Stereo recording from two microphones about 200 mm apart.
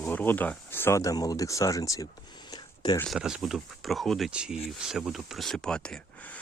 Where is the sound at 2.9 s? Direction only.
Centre (ahead or behind).